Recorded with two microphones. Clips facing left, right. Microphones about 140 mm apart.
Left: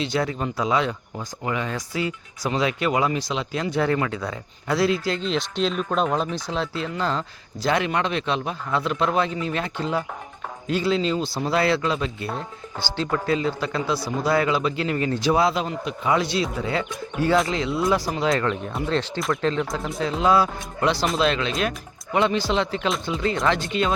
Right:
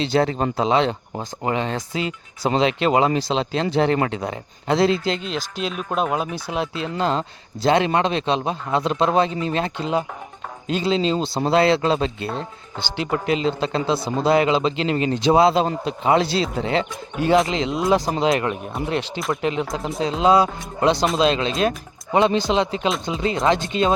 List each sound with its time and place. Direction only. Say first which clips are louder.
0.0 s speech: right 5 dB; 30° right (ahead or behind)
5.2 s speech: left 3 dB; 5° right (ahead or behind); by 12.3 s 30° right (ahead or behind)
12.4 s speech: right 1 dB; 20° right (ahead or behind)